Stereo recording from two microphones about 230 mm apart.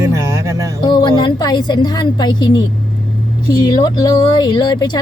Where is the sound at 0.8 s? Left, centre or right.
Centre.